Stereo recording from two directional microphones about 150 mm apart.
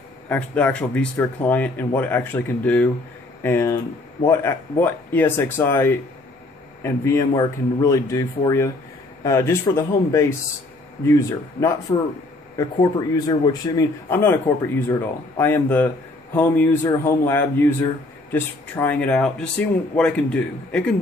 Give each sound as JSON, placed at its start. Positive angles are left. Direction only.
{"t": 0.3, "sound": "speech", "side_deg": 10}
{"t": 13.1, "sound": "speech", "side_deg": 25}